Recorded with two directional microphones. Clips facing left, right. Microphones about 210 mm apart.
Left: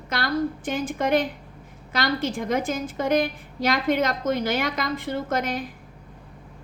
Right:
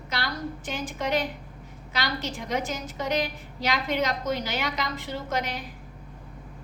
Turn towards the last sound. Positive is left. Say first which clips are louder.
# left 4 dB
turn(degrees=55)  # may be behind; listen again after turning